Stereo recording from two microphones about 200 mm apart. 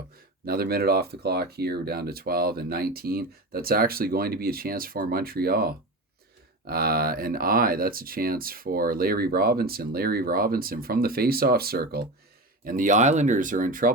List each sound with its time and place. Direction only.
0.4 s speech: 50° right (ahead or behind)